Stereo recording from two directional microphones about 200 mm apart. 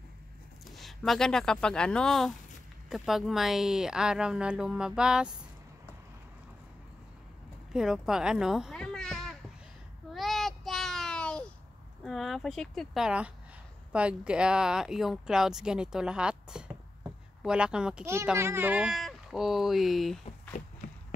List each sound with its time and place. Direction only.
0.7 s speech: centre (ahead or behind)
7.7 s a child's voice: centre (ahead or behind)
10.1 s a sound: centre (ahead or behind)
12.0 s speech: centre (ahead or behind)
20.8 s walk: 40° left (ahead or behind)